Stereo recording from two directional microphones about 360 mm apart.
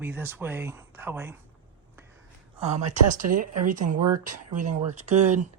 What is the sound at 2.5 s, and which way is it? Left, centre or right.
Speech, centre.